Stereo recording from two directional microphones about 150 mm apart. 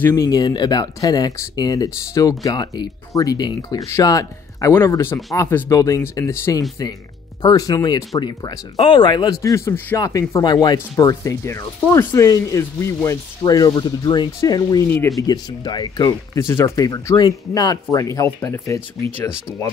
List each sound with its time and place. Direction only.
0.1 s speech: 25° left (ahead or behind)